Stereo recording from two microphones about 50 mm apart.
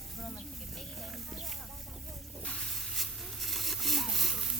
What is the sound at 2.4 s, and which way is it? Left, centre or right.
Snake, centre.